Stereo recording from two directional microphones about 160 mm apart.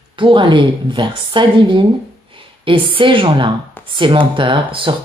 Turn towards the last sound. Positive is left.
turn(degrees=-30)  # may be behind; listen again after turning